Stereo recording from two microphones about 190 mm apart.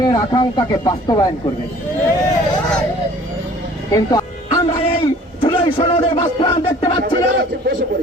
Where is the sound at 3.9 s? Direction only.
20° left (ahead or behind).